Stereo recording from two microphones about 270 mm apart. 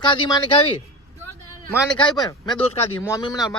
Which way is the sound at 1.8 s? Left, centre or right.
Centre.